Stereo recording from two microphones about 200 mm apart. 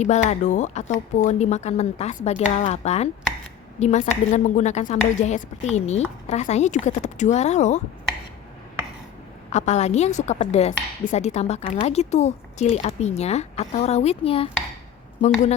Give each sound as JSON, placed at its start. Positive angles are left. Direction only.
{"t": 0.0, "sound": "a woman's voice", "side_deg": 35}
{"t": 9.5, "sound": "a woman's voice", "side_deg": 35}